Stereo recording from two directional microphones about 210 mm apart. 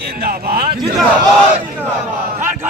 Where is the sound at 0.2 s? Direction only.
45° right (ahead or behind).